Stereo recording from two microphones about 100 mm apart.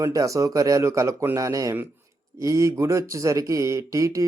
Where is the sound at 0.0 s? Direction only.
35° right (ahead or behind).